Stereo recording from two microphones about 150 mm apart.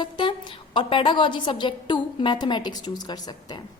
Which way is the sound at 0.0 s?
30° left (ahead or behind).